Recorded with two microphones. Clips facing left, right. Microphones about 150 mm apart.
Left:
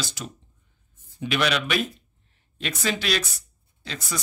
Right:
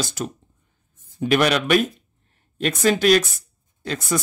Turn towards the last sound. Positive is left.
turn(degrees=-50)  # may be behind; listen again after turning